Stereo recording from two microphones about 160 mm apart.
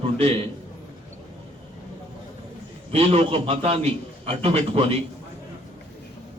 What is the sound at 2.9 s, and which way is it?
A man's voice, 40° right (ahead or behind).